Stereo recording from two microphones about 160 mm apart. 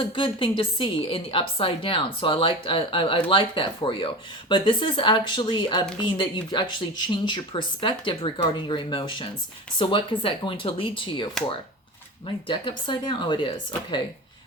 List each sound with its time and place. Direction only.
0.0 s a woman's voice: 30° left (ahead or behind)